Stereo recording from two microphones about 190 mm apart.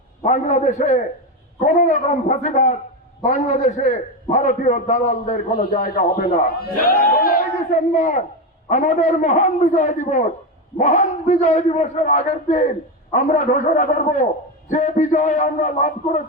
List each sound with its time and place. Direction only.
0.2 s a man's voice: 40° left (ahead or behind)